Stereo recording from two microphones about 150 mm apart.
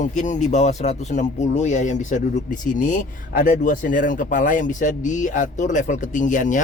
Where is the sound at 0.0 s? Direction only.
55° left (ahead or behind).